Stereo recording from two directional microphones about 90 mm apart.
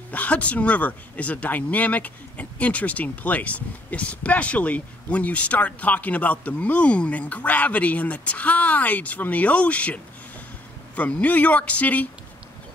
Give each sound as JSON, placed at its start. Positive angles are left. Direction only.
{"t": 0.1, "sound": "speech", "side_deg": 15}
{"t": 11.0, "sound": "speech", "side_deg": 15}